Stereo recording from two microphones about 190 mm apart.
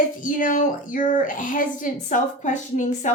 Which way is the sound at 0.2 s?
45° left (ahead or behind).